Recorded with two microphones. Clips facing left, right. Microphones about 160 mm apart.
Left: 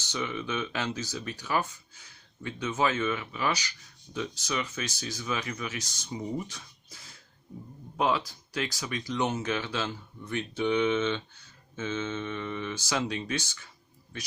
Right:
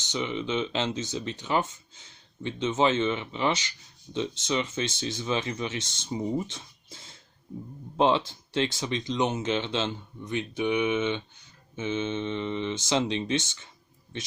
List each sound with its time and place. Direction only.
0.0 s speech: 20° right (ahead or behind)